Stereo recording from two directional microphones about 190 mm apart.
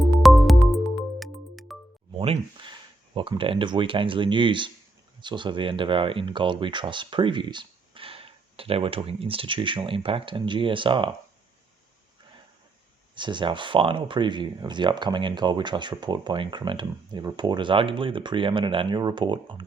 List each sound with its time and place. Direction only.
0.2 s music: centre (ahead or behind)
2.1 s a sound: 30° right (ahead or behind)
3.2 s speech: 25° right (ahead or behind)
13.1 s speech: 25° right (ahead or behind)